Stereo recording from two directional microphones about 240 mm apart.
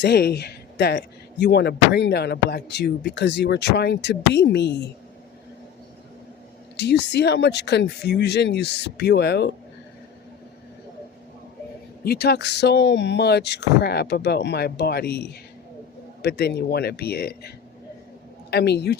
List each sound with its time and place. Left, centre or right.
0.0 s speech: left
6.7 s speech: left
12.0 s speech: left
18.5 s speech: left